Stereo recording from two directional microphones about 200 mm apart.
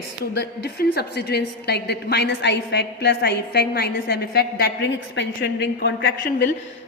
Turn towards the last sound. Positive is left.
turn(degrees=45)  # may be behind; listen again after turning